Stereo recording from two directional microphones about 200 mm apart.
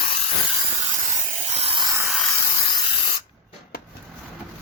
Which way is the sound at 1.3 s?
30° right (ahead or behind).